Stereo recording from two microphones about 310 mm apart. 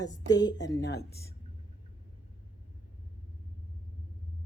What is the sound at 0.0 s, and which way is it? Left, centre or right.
Speech, centre.